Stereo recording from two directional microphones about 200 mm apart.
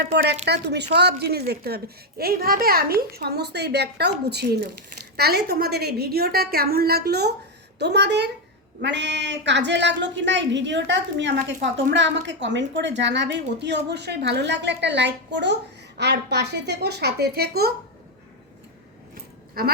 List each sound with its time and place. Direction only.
0.4 s a woman's voice: 55° right (ahead or behind)
19.1 s keys jangling: 50° right (ahead or behind)